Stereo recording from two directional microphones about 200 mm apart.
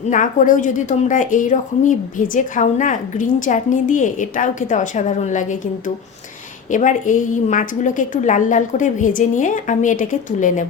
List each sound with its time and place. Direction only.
0.1 s speech: 40° left (ahead or behind)
6.7 s speech: 40° left (ahead or behind)